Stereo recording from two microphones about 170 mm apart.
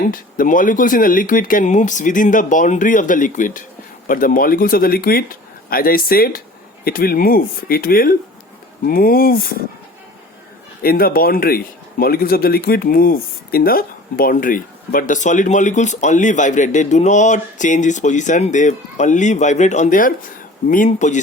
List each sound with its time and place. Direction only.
0.0 s speech: 55° left (ahead or behind)
10.8 s speech: 60° left (ahead or behind)